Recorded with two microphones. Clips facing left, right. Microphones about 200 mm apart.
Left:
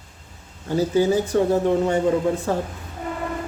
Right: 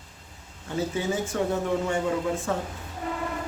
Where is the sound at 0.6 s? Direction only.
35° left (ahead or behind).